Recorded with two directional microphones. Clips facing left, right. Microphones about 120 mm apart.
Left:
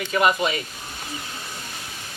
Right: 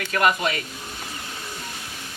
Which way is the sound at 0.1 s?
Centre (ahead or behind).